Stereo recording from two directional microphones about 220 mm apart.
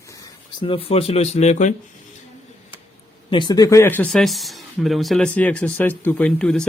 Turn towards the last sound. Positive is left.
turn(degrees=5)  # may be behind; listen again after turning